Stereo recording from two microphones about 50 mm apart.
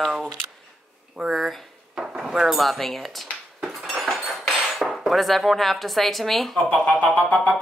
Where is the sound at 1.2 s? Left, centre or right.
Centre.